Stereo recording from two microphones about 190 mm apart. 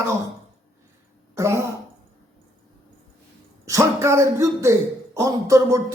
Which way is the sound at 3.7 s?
15° right (ahead or behind).